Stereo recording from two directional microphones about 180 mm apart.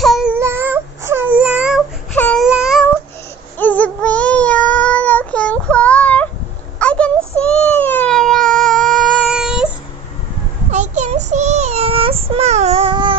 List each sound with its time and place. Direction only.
0.0 s wail: centre (ahead or behind)
2.1 s baby cry: 10° left (ahead or behind)
2.4 s meow: 5° right (ahead or behind)
3.5 s child singing: 10° left (ahead or behind)
6.8 s a sound: 5° left (ahead or behind)
10.7 s a sound: 40° right (ahead or behind)
11.2 s child singing: 40° right (ahead or behind)